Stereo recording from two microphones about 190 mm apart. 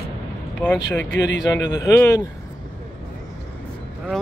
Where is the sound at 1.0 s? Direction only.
65° left (ahead or behind).